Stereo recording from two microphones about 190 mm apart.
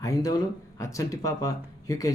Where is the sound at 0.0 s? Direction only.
20° left (ahead or behind).